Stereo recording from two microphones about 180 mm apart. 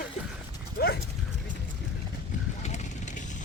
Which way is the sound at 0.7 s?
60° left (ahead or behind).